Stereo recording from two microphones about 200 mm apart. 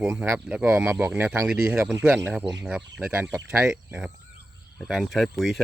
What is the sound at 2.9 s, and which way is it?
Speech, 5° right (ahead or behind).